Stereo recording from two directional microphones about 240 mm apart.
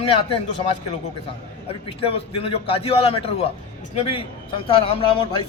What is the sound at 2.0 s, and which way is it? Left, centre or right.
A man's voice, left.